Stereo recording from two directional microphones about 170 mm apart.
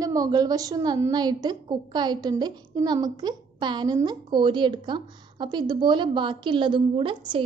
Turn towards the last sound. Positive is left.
turn(degrees=-30)  # may be behind; listen again after turning